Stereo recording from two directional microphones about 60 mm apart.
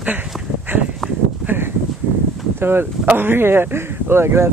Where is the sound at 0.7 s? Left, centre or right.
Right.